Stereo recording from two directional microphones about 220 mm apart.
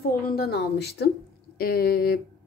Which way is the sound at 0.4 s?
45° left (ahead or behind).